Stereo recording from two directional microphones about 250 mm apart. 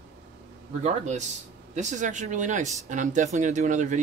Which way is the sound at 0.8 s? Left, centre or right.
Right.